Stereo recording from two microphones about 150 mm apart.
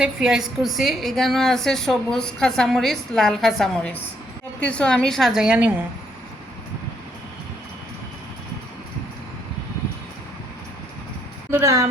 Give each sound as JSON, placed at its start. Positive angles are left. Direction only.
{"t": 0.0, "sound": "a woman's voice", "side_deg": -5}
{"t": 11.5, "sound": "a woman's voice", "side_deg": -20}